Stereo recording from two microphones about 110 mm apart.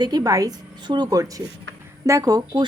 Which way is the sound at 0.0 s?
35° right (ahead or behind).